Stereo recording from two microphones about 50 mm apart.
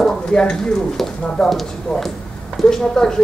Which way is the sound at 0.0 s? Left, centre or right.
Centre.